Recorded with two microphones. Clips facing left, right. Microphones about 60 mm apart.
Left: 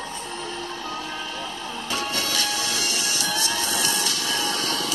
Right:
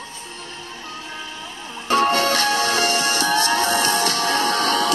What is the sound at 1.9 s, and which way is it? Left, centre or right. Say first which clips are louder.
Music: right 12 dB; right.